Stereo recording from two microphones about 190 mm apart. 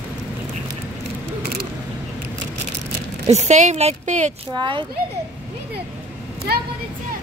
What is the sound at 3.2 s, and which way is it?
Speech, 35° right (ahead or behind).